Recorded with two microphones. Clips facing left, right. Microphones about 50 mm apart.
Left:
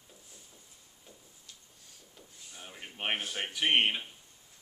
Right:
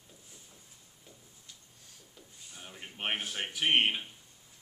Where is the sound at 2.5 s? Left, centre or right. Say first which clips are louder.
Even; centre.